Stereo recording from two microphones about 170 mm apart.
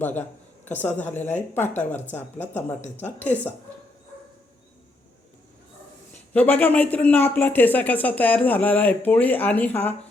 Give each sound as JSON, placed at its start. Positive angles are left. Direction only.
{"t": 0.0, "sound": "speech", "side_deg": 10}
{"t": 6.3, "sound": "speech", "side_deg": 10}